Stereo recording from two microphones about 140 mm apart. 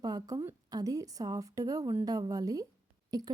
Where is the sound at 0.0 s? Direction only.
30° right (ahead or behind).